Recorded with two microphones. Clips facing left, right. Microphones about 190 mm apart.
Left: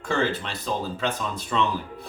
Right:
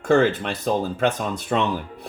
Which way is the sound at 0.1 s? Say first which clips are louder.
Right 8 dB; 50° right (ahead or behind).